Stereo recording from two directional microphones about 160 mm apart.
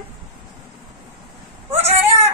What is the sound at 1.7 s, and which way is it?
Cat, 40° right (ahead or behind).